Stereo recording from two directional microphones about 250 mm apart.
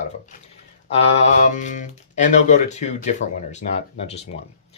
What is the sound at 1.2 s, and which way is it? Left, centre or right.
Speech, left.